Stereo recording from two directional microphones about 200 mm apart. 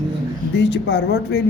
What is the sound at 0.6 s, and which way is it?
Speech, 60° left (ahead or behind).